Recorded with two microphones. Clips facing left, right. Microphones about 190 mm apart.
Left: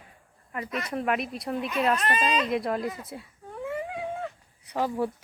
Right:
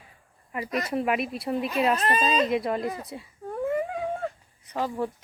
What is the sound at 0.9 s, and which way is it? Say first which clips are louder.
Speech: right 1 dB; 5° right (ahead or behind).